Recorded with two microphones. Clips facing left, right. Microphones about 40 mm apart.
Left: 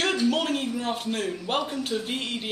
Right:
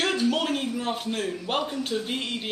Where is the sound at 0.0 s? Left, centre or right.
Centre.